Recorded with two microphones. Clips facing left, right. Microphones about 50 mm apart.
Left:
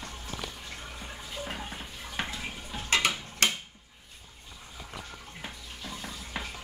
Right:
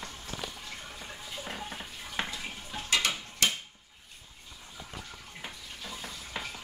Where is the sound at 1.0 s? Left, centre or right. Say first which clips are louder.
Left 3 dB; centre.